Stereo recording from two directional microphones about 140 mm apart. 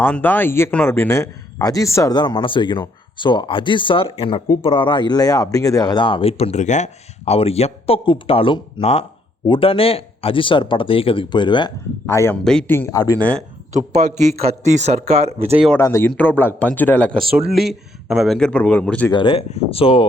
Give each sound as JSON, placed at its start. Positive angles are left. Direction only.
{"t": 0.0, "sound": "a man's voice", "side_deg": 15}
{"t": 12.0, "sound": "a man's voice", "side_deg": 20}
{"t": 12.5, "sound": "speech", "side_deg": 5}
{"t": 12.7, "sound": "speech", "side_deg": 15}
{"t": 13.7, "sound": "a man's voice", "side_deg": -55}
{"t": 15.8, "sound": "speech", "side_deg": 20}
{"t": 17.5, "sound": "speech", "side_deg": 0}
{"t": 19.1, "sound": "speech", "side_deg": 40}